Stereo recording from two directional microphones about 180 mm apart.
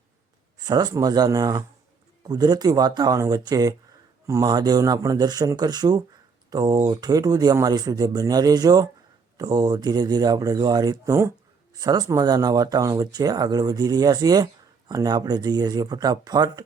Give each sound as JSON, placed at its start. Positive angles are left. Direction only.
{"t": 0.6, "sound": "speech", "side_deg": -20}